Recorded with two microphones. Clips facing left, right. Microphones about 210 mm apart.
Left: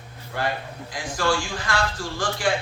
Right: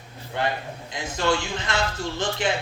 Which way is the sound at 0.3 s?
20° right (ahead or behind).